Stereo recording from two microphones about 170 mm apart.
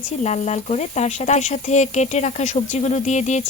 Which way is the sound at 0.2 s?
40° left (ahead or behind).